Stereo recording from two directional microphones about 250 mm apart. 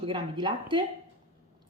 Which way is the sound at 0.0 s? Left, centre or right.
Centre.